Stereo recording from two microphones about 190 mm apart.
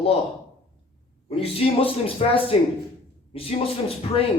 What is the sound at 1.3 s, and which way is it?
Speech, 30° left (ahead or behind).